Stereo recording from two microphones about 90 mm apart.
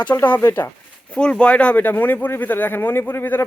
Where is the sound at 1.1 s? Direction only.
10° left (ahead or behind).